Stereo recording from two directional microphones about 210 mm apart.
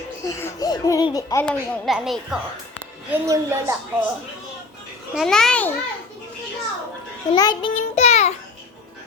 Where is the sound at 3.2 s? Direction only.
15° right (ahead or behind).